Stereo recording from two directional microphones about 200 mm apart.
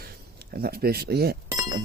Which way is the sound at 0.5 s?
50° right (ahead or behind).